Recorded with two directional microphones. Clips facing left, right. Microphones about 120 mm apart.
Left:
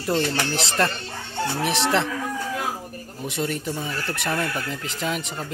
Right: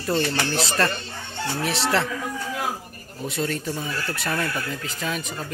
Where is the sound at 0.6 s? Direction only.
25° left (ahead or behind).